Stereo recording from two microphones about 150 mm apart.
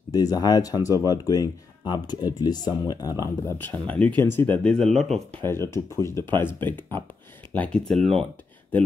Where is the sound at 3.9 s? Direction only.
10° left (ahead or behind).